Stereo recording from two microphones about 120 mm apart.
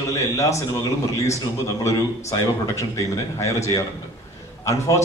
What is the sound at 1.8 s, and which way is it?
A man's voice, 25° left (ahead or behind).